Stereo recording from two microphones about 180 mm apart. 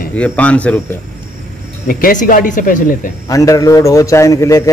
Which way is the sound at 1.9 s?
50° left (ahead or behind).